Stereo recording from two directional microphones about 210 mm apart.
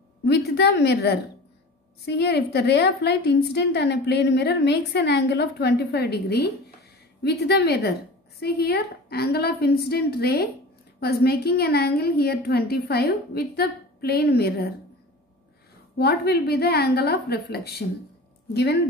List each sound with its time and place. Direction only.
0.2 s a woman's voice: 50° left (ahead or behind)
16.0 s a woman's voice: 50° left (ahead or behind)